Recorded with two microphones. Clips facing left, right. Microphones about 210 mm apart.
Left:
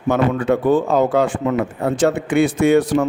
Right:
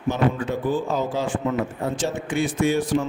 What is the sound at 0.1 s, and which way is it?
Speech, 65° left (ahead or behind).